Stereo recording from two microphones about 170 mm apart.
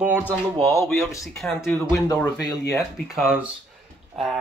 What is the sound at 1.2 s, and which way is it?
Speech, centre (ahead or behind).